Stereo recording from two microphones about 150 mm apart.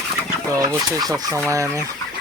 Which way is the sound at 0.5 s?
25° right (ahead or behind).